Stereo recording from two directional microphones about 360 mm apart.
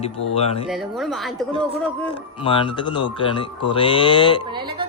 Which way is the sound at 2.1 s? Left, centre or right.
Centre.